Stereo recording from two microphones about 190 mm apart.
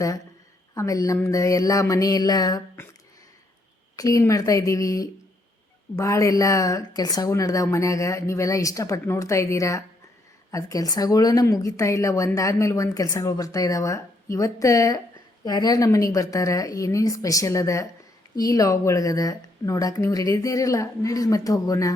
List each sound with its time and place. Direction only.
0.7 s a woman's voice: 15° left (ahead or behind)
3.9 s a woman's voice: 20° left (ahead or behind)